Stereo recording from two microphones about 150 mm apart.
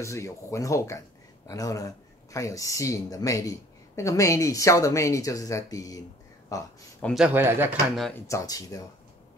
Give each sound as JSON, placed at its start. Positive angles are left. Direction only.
{"t": 0.0, "sound": "speech", "side_deg": 20}
{"t": 7.2, "sound": "speech", "side_deg": -10}
{"t": 8.1, "sound": "speech", "side_deg": 20}